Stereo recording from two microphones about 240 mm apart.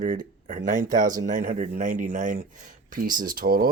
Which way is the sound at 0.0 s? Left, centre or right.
Right.